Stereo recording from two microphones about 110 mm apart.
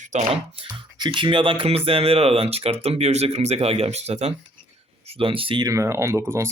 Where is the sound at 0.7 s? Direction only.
40° right (ahead or behind); by 4.4 s 70° right (ahead or behind).